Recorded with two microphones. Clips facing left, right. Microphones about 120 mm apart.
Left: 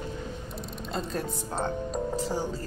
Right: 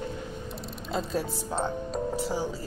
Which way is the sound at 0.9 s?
Centre (ahead or behind).